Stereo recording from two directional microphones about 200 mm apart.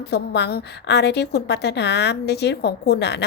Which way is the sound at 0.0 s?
55° left (ahead or behind).